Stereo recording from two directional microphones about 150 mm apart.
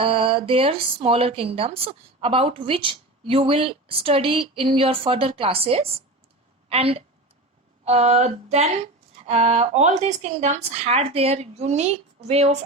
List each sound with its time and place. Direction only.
0.0 s a woman's voice: 35° right (ahead or behind)